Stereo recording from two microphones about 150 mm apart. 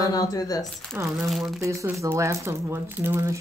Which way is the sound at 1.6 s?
20° right (ahead or behind).